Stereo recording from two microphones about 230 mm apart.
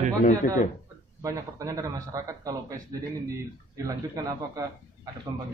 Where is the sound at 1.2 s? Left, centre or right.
Centre.